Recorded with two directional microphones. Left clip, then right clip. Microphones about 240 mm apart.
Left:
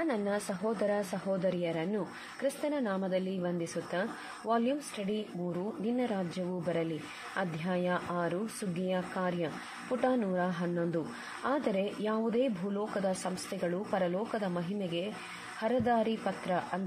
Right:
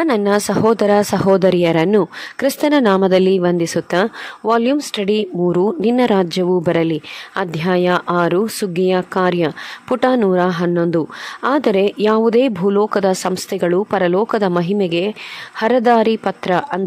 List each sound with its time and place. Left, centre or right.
0.0 s speech: right